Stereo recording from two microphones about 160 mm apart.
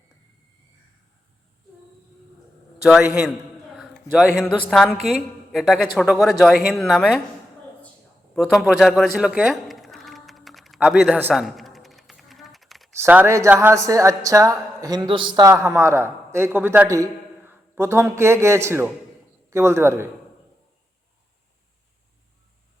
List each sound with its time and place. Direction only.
3.8 s a man's voice: centre (ahead or behind)
8.4 s a sound: centre (ahead or behind)
10.8 s a woman's voice: 5° right (ahead or behind)
11.3 s typing: centre (ahead or behind)
13.0 s a woman's voice: 15° right (ahead or behind)